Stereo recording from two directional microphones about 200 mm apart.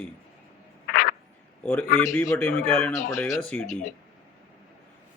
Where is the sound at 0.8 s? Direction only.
45° left (ahead or behind).